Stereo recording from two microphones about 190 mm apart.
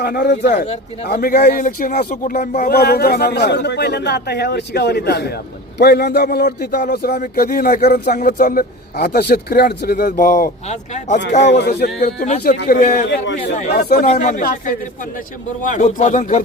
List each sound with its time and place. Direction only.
0.0 s a man's voice: 60° left (ahead or behind)
8.1 s a man's voice: 45° left (ahead or behind)
11.4 s speech: 65° left (ahead or behind)
12.4 s a man's voice: 55° left (ahead or behind)